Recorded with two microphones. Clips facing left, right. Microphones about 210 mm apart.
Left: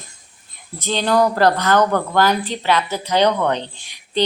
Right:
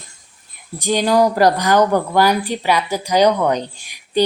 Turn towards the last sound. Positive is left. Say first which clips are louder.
# right 3 dB
turn(degrees=-10)  # may be behind; listen again after turning